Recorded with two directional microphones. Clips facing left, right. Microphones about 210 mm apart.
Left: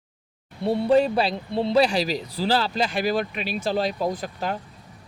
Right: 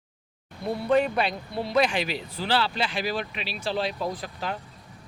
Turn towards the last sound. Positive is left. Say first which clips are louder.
# left 4 dB
turn(degrees=45)  # may be behind; listen again after turning